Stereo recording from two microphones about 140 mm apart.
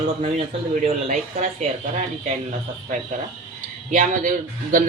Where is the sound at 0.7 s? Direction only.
65° right (ahead or behind).